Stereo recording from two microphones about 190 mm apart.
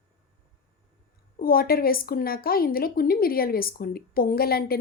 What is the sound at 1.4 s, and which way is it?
A woman's voice, 50° left (ahead or behind).